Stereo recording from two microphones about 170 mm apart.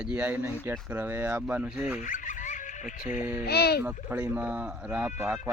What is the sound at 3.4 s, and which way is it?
Speech, 70° left (ahead or behind).